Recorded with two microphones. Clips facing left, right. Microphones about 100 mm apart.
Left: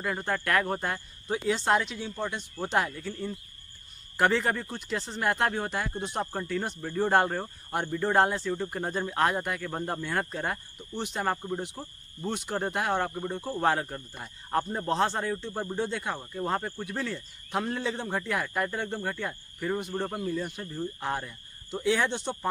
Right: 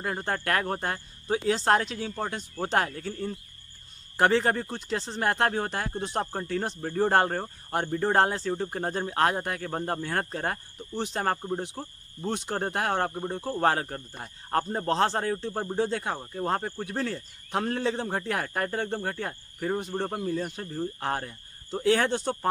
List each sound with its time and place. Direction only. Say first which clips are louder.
0.0 s speech: even; 35° right (ahead or behind)
13.6 s speech: right 1 dB; 40° right (ahead or behind)